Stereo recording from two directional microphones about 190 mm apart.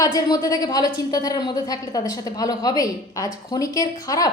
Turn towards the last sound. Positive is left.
turn(degrees=20)  # may be behind; listen again after turning